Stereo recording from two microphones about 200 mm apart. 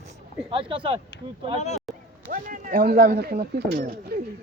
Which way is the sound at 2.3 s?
45° right (ahead or behind).